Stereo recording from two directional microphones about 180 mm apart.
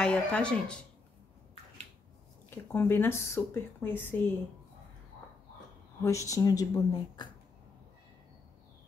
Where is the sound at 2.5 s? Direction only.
10° left (ahead or behind).